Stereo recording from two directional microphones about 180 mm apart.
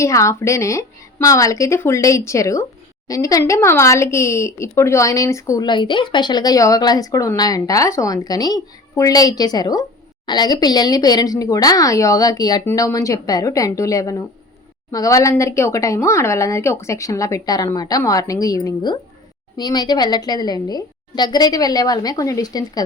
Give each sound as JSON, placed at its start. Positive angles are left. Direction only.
{"t": 0.0, "sound": "speech", "side_deg": 15}